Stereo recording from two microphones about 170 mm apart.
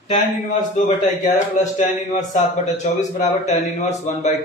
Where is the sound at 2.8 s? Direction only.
45° left (ahead or behind).